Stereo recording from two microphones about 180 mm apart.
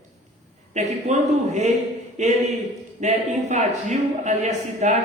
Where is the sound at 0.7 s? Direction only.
40° right (ahead or behind).